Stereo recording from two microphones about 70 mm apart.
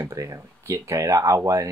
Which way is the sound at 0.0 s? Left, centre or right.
Right.